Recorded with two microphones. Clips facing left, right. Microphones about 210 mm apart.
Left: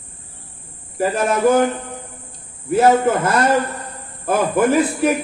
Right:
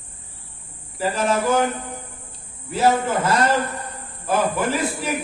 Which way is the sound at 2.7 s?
55° left (ahead or behind).